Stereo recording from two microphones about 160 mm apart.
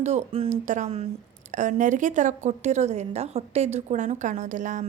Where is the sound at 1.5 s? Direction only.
50° right (ahead or behind).